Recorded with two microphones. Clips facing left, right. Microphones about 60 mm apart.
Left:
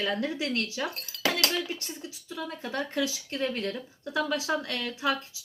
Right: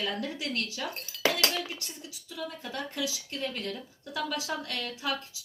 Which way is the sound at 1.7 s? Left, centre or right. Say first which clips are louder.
Left 4 dB; left.